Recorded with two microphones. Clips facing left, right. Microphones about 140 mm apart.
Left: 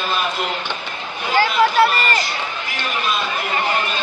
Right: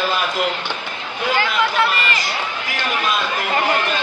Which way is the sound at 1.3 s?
35° left (ahead or behind).